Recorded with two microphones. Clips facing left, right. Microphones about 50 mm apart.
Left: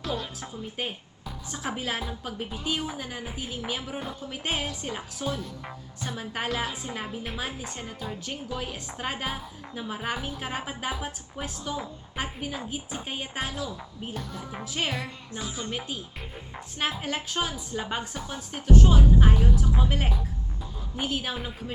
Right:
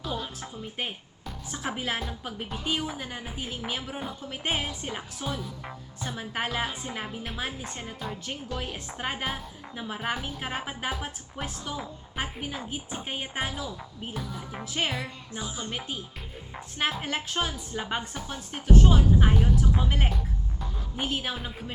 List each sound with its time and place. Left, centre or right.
0.3 s a woman's voice: centre
14.3 s a woman's voice: centre
17.0 s a woman's voice: centre